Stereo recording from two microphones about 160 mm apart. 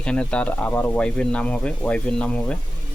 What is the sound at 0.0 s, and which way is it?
Speech, 5° left (ahead or behind).